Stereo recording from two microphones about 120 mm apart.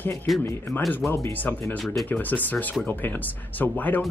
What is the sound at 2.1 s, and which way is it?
Speech, 15° left (ahead or behind).